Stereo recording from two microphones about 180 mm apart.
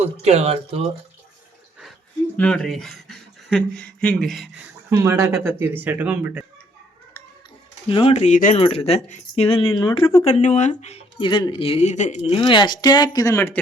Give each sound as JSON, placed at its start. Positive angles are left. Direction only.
{"t": 0.0, "sound": "speech", "side_deg": -35}
{"t": 2.3, "sound": "speech", "side_deg": 5}
{"t": 4.9, "sound": "speech", "side_deg": -15}
{"t": 7.9, "sound": "speech", "side_deg": 30}
{"t": 8.6, "sound": "speech", "side_deg": 35}